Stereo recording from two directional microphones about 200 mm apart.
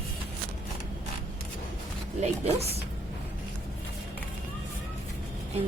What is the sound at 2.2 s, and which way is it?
Speech, 30° right (ahead or behind).